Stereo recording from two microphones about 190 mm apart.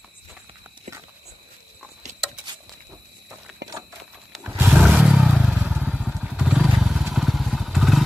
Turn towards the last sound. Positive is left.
turn(degrees=0)  # may be behind; listen again after turning